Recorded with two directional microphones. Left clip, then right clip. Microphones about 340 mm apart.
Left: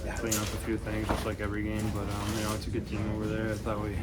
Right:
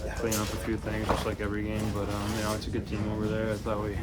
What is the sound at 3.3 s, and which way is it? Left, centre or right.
Speech, centre.